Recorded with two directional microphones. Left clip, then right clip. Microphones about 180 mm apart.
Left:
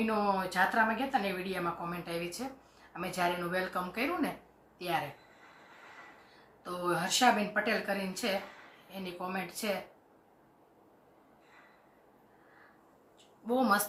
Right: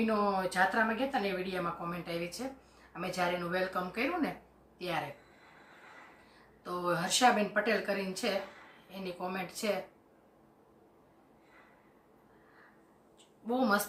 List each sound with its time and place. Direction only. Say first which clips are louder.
0.0 s speech: even; centre (ahead or behind)
6.7 s speech: even; 10° right (ahead or behind)
13.5 s speech: left 2 dB; centre (ahead or behind)